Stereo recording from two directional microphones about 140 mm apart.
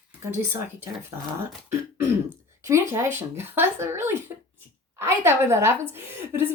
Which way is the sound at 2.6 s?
20° right (ahead or behind).